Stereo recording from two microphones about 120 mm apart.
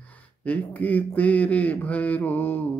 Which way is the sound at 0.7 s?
15° left (ahead or behind).